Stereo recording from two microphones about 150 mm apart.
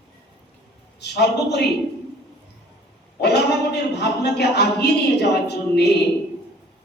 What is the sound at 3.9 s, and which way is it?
A woman's voice, 90° left.